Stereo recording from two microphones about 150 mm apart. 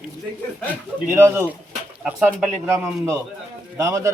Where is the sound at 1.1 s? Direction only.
15° right (ahead or behind).